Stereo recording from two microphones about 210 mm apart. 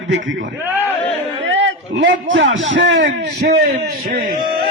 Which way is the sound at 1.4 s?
60° right (ahead or behind).